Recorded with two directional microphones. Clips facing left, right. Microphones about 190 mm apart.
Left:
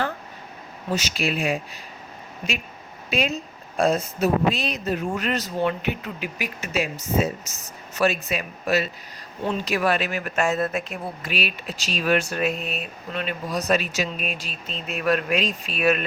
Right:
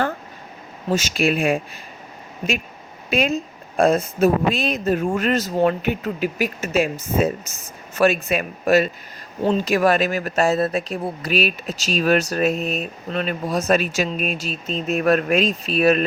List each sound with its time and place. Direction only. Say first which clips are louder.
0.9 s speech: right 6 dB; 45° right (ahead or behind)
3.1 s speech: right 5 dB; 50° right (ahead or behind); by 16.0 s 35° right (ahead or behind)